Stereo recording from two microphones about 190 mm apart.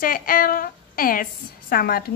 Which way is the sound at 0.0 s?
50° left (ahead or behind).